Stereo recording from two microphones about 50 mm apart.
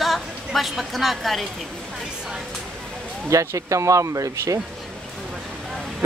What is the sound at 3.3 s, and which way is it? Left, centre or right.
Speech, right.